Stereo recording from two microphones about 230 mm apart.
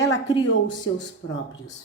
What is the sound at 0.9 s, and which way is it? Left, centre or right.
Speech, left.